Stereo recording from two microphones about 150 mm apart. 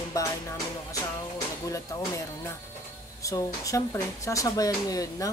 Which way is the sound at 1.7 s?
20° left (ahead or behind).